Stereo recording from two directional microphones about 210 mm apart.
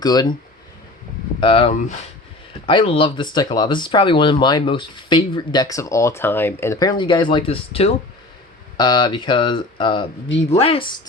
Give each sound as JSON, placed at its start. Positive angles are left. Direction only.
{"t": 0.0, "sound": "speech", "side_deg": 20}
{"t": 1.4, "sound": "speech", "side_deg": 25}